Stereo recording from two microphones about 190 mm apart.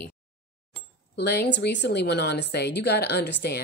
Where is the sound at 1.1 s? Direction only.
60° left (ahead or behind).